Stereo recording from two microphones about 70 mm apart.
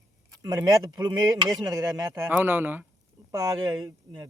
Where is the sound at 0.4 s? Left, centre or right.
Right.